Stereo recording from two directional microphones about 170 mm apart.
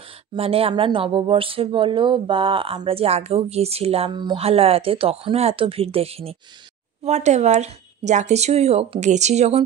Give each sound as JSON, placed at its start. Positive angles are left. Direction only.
{"t": 0.3, "sound": "speech", "side_deg": -35}